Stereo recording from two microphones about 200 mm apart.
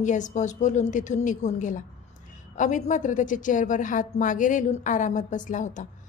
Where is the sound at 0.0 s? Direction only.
40° left (ahead or behind).